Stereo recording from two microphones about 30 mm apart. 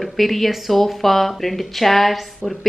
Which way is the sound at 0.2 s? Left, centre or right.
Centre.